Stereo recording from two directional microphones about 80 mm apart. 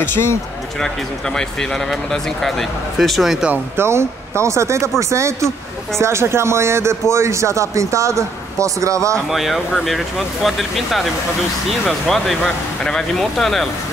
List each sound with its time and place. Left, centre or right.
0.0 s speech: left
0.7 s speech: centre
3.7 s a man's voice: right
9.3 s speech: centre
12.1 s speech: centre